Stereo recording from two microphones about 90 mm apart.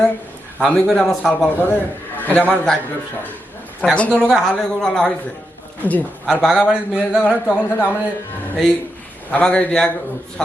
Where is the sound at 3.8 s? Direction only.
15° left (ahead or behind).